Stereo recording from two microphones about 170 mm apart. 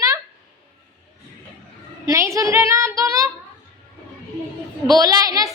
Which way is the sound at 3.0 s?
20° right (ahead or behind).